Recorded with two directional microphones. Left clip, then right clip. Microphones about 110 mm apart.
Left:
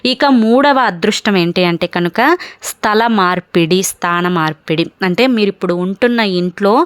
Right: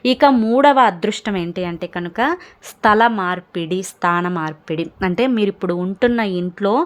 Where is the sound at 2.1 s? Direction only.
30° left (ahead or behind); by 3.7 s 55° left (ahead or behind).